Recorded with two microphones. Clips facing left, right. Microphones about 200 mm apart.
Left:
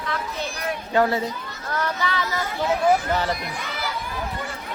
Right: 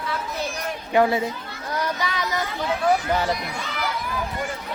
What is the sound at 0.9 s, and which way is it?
Speech, 15° right (ahead or behind).